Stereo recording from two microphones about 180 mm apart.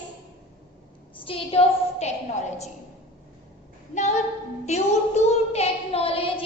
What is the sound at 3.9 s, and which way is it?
Child singing, 40° left (ahead or behind).